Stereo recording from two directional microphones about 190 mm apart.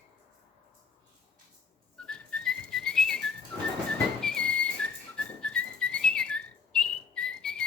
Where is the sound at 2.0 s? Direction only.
5° left (ahead or behind).